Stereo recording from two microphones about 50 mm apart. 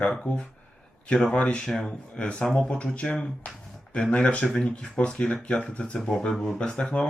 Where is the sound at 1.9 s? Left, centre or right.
Centre.